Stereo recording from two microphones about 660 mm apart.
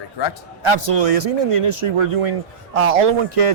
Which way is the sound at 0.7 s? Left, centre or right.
Right.